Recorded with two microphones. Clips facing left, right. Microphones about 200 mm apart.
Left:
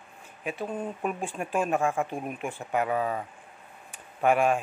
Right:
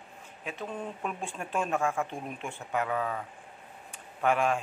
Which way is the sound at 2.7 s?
20° left (ahead or behind).